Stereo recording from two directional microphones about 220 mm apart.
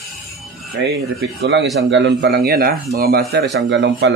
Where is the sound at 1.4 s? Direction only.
55° right (ahead or behind).